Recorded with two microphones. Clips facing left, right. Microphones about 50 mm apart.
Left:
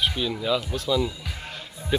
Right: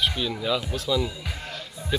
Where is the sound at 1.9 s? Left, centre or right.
Centre.